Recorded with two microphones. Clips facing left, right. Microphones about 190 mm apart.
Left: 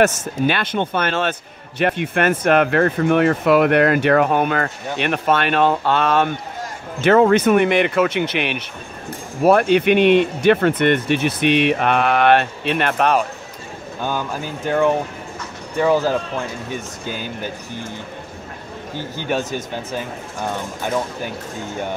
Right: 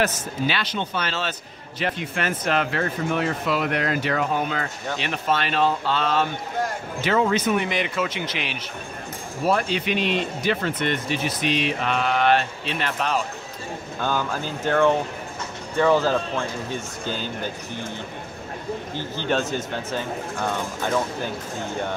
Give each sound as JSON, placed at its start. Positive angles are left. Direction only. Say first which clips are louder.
{"t": 0.0, "sound": "speech", "louder": "left 7 dB", "side_deg": 50}
{"t": 14.0, "sound": "speech", "louder": "left 1 dB", "side_deg": 15}
{"t": 19.1, "sound": "speech", "louder": "left 1 dB", "side_deg": 10}